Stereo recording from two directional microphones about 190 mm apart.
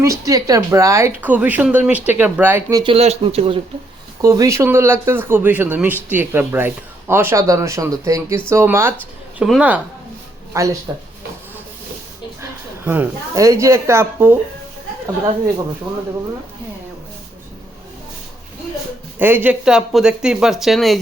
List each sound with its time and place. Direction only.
0.0 s speech: 15° right (ahead or behind)
4.2 s speech: 20° right (ahead or behind)
12.4 s speech: 10° right (ahead or behind)
19.2 s speech: 10° right (ahead or behind)